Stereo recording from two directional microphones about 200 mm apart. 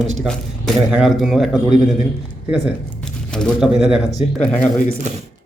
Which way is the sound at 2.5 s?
Centre (ahead or behind).